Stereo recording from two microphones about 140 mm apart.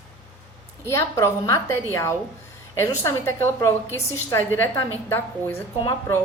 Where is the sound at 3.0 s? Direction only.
20° left (ahead or behind).